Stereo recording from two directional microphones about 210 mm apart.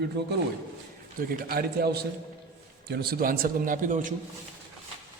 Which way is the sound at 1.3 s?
45° right (ahead or behind).